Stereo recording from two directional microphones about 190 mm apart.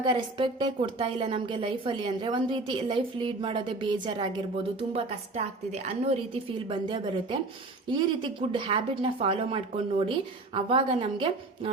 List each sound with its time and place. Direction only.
0.0 s a woman's voice: 25° right (ahead or behind)